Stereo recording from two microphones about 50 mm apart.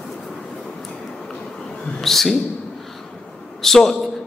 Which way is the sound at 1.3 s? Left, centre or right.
Centre.